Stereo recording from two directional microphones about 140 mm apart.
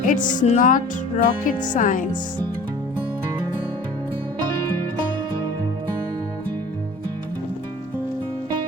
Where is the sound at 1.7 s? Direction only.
65° left (ahead or behind).